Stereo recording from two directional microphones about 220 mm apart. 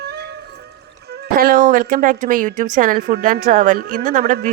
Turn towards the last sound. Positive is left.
turn(degrees=-35)  # may be behind; listen again after turning